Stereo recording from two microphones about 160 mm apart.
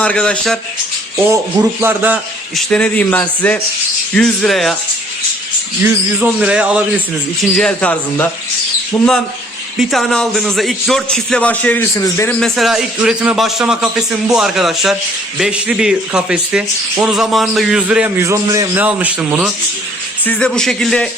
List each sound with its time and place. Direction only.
0.0 s speech: 5° left (ahead or behind)
1.8 s a man's voice: 10° right (ahead or behind)
2.6 s a man's voice: 5° left (ahead or behind)
5.8 s a man's voice: 10° right (ahead or behind)
7.5 s a man's voice: 5° left (ahead or behind)
12.4 s speech: centre (ahead or behind)
20.2 s speech: 5° left (ahead or behind)